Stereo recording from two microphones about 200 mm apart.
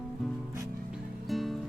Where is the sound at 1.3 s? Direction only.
Centre (ahead or behind).